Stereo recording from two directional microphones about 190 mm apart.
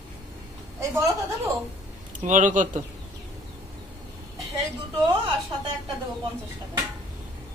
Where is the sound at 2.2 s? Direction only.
40° right (ahead or behind).